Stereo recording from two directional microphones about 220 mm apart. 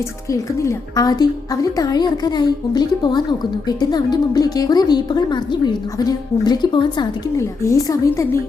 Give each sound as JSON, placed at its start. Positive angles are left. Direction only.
{"t": 0.3, "sound": "a woman's voice", "side_deg": 15}